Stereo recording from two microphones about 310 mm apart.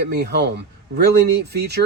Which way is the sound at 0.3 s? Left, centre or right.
Right.